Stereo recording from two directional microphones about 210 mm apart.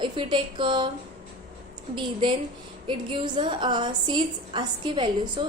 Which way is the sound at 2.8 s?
25° right (ahead or behind).